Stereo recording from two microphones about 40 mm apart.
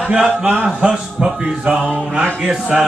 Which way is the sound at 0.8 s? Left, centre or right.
Right.